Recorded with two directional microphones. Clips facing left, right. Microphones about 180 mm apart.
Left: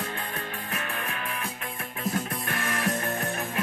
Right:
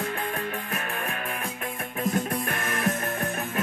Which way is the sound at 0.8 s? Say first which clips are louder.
Right 2 dB; 45° right (ahead or behind).